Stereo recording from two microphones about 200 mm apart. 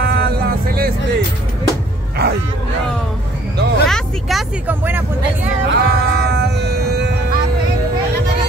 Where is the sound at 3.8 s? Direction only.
Centre (ahead or behind).